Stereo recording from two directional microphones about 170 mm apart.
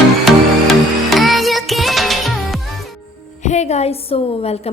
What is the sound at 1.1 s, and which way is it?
Music, centre (ahead or behind).